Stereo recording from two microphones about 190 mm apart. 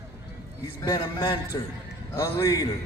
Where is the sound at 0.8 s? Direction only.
20° left (ahead or behind).